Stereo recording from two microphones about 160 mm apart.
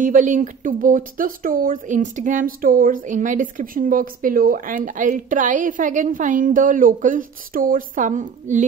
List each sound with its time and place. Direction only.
0.0 s speech: 55° right (ahead or behind)